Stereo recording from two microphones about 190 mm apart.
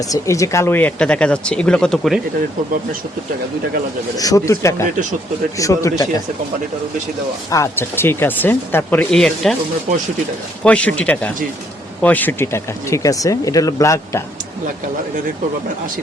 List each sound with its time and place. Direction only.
0.1 s speech: 15° left (ahead or behind)
4.2 s speech: 15° left (ahead or behind)
7.5 s speech: 15° left (ahead or behind)
10.6 s speech: 5° left (ahead or behind)